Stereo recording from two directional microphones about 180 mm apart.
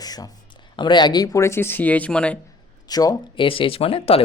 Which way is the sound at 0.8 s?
25° left (ahead or behind).